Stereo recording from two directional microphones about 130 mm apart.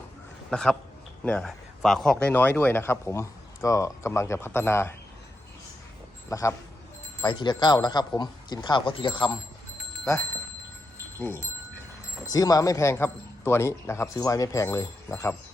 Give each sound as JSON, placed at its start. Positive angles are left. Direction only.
{"t": 0.5, "sound": "a man's voice", "side_deg": 5}
{"t": 6.2, "sound": "a man's voice", "side_deg": 25}
{"t": 7.3, "sound": "speech", "side_deg": 35}
{"t": 10.1, "sound": "speech", "side_deg": 25}
{"t": 12.3, "sound": "speech", "side_deg": 30}